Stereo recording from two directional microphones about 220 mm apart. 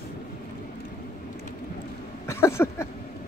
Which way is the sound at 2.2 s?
10° left (ahead or behind).